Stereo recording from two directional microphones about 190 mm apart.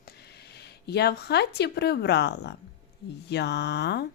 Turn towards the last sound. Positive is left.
turn(degrees=60)  # may be behind; listen again after turning